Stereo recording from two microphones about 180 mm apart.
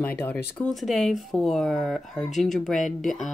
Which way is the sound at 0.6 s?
Centre (ahead or behind).